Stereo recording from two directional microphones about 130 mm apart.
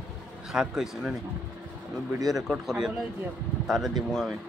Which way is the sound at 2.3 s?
Centre (ahead or behind).